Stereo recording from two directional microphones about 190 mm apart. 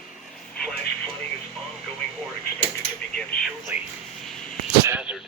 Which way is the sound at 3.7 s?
10° right (ahead or behind).